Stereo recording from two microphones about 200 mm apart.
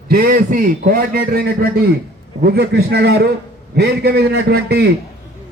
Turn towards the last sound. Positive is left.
turn(degrees=-55)  # may be behind; listen again after turning